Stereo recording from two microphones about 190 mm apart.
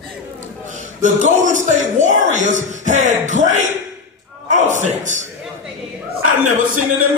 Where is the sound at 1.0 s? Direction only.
40° right (ahead or behind).